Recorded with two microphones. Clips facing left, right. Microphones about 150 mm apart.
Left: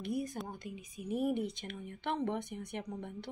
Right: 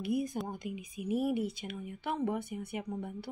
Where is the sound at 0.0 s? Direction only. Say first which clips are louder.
Right 4 dB; 10° right (ahead or behind).